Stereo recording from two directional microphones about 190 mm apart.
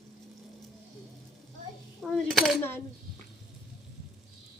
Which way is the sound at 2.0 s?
Centre (ahead or behind).